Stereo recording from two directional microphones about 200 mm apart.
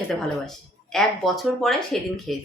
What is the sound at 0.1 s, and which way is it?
Speech, 5° left (ahead or behind).